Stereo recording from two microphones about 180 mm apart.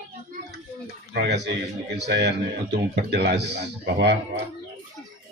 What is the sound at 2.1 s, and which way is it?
Speech, 70° right (ahead or behind).